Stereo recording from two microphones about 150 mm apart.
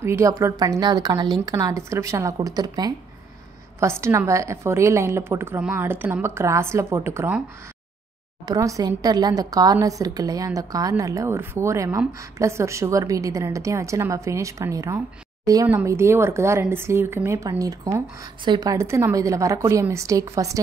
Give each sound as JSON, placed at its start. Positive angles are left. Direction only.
{"t": 0.0, "sound": "a woman's voice", "side_deg": -20}
{"t": 8.5, "sound": "a woman's voice", "side_deg": -20}